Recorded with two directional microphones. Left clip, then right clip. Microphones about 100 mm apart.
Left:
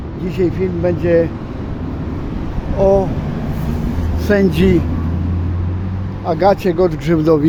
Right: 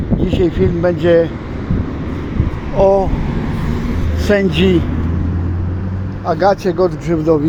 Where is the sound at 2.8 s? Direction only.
15° right (ahead or behind).